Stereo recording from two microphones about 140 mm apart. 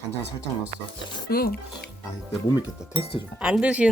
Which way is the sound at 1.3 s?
90° left.